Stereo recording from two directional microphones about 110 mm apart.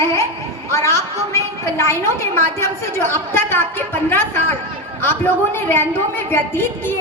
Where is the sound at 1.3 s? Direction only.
25° left (ahead or behind).